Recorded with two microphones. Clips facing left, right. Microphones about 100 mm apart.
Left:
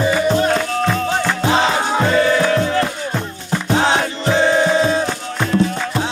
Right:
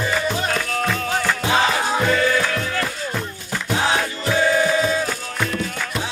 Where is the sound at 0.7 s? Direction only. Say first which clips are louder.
Left 4 dB; 25° left (ahead or behind).